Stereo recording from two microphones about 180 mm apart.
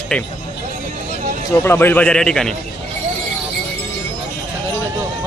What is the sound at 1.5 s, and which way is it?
Speech, 15° left (ahead or behind).